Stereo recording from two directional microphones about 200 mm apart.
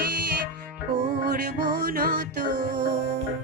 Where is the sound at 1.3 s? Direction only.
55° right (ahead or behind).